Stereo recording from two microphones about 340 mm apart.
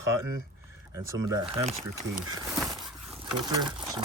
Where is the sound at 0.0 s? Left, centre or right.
Centre.